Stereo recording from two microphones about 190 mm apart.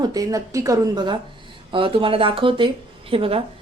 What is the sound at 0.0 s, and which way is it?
Speech, 20° right (ahead or behind).